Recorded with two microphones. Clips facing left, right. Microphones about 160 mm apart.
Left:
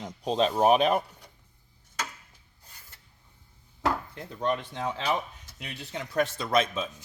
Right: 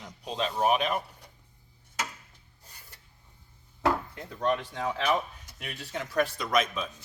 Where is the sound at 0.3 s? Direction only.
35° left (ahead or behind).